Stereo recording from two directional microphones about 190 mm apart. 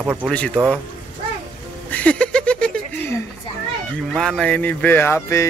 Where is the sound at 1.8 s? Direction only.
5° left (ahead or behind).